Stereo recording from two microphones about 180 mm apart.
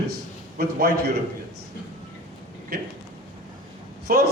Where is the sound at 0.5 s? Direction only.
60° right (ahead or behind).